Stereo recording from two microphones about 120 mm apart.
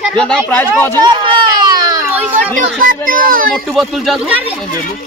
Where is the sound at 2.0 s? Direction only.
15° right (ahead or behind).